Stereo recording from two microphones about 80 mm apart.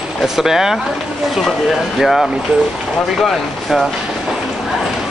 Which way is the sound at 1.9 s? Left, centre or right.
Centre.